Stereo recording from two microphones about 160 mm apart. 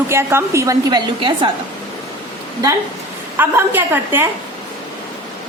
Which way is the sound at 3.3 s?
10° right (ahead or behind).